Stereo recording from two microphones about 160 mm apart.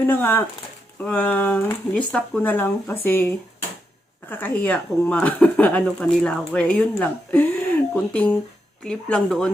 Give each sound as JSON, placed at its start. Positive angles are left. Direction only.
{"t": 0.1, "sound": "speech", "side_deg": 10}